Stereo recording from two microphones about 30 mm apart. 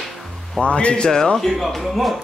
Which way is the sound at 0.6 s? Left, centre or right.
Left.